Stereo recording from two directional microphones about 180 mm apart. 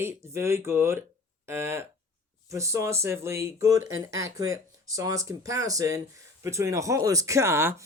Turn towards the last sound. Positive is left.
turn(degrees=-15)  # may be behind; listen again after turning